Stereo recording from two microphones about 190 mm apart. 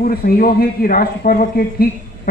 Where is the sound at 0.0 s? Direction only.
50° left (ahead or behind).